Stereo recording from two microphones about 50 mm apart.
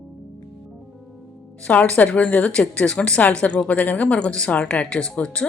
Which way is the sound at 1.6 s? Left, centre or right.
Left.